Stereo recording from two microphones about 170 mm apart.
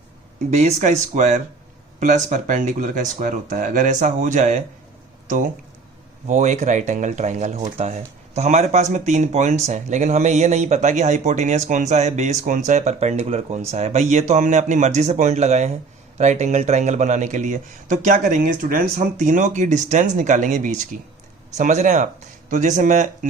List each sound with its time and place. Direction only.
0.5 s speech: 45° right (ahead or behind)
6.2 s speech: 45° right (ahead or behind)